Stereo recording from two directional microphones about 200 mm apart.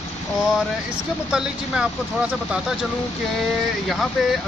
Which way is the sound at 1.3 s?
5° right (ahead or behind).